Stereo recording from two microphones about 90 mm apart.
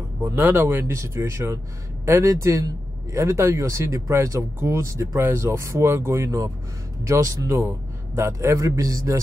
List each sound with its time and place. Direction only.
0.2 s speech: 25° right (ahead or behind)